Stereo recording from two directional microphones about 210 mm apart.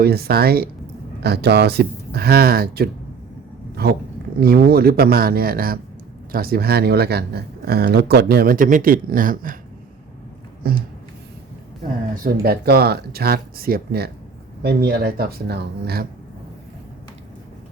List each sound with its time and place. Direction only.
0.0 s speech: 45° right (ahead or behind)
10.6 s speech: 45° right (ahead or behind)